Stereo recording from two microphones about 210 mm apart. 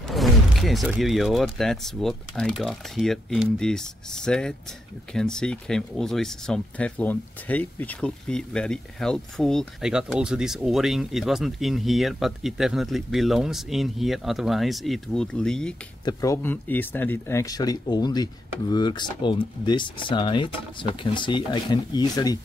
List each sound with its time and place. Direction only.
0.1 s speech: centre (ahead or behind)
16.1 s speech: 15° left (ahead or behind)